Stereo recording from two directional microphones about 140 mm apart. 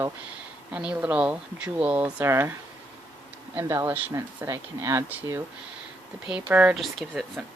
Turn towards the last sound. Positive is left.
turn(degrees=0)  # may be behind; listen again after turning